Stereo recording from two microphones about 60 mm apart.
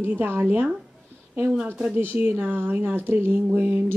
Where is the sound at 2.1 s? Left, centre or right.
Right.